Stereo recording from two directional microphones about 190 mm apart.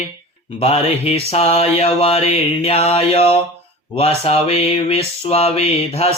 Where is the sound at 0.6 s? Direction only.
35° left (ahead or behind).